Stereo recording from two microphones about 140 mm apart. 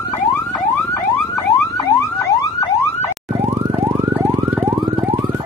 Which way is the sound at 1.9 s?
20° left (ahead or behind).